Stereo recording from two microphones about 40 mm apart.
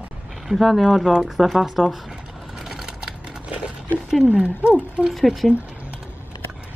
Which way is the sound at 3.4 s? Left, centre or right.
Right.